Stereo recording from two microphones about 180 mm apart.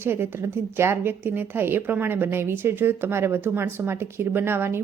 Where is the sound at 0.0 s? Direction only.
10° right (ahead or behind).